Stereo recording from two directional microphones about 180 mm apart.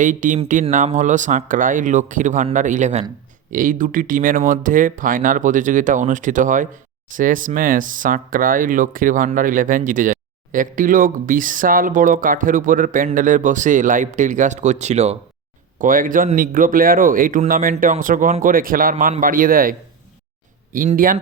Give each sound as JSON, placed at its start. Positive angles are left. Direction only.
{"t": 0.0, "sound": "speech", "side_deg": -45}
{"t": 15.8, "sound": "speech", "side_deg": -50}
{"t": 20.7, "sound": "speech", "side_deg": -50}